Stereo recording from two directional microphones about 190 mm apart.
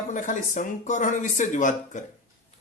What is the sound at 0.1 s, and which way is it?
Speech, 40° left (ahead or behind).